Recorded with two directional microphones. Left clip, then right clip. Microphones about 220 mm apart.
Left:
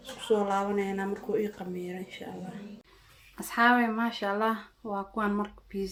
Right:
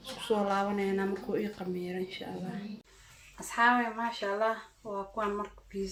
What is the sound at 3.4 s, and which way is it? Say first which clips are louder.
Speech: left 2 dB; 45° left (ahead or behind).